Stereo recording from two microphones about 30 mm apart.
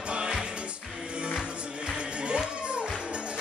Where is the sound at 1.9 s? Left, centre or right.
Right.